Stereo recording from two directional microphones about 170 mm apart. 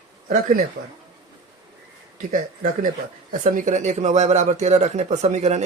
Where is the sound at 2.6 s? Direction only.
55° right (ahead or behind).